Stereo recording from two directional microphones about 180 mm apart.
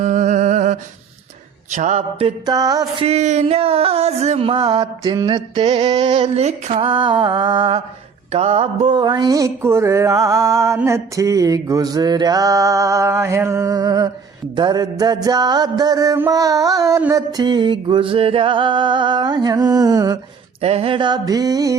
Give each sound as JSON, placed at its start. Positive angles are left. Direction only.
{"t": 0.0, "sound": "humming", "side_deg": -40}
{"t": 1.7, "sound": "music", "side_deg": -40}
{"t": 3.1, "sound": "music", "side_deg": -40}
{"t": 6.2, "sound": "music", "side_deg": -40}
{"t": 8.3, "sound": "mantra", "side_deg": -35}
{"t": 14.5, "sound": "music", "side_deg": -25}
{"t": 20.6, "sound": "music", "side_deg": -35}